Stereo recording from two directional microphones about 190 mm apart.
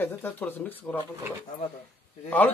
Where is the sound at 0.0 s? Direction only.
10° left (ahead or behind).